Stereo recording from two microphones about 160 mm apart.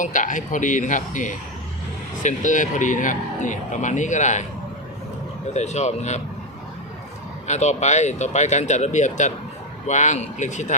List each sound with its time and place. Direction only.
0.0 s speech: 55° left (ahead or behind)
5.5 s speech: 45° left (ahead or behind)
7.4 s speech: 45° left (ahead or behind)